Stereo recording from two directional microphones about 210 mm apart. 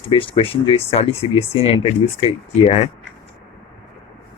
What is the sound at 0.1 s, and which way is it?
Speech, 25° left (ahead or behind).